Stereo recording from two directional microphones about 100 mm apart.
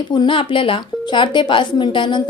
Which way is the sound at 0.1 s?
55° left (ahead or behind).